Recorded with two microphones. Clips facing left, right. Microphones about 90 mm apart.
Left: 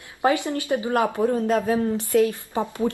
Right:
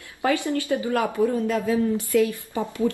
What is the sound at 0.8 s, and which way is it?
Speech, 35° left (ahead or behind).